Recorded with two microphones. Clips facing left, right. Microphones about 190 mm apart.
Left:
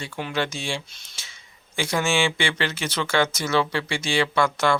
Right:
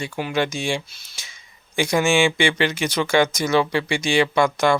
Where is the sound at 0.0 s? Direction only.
10° right (ahead or behind).